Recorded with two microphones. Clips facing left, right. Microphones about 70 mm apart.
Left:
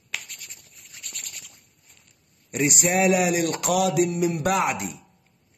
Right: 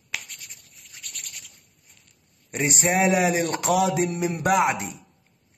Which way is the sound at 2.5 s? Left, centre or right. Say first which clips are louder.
Left 1 dB; right.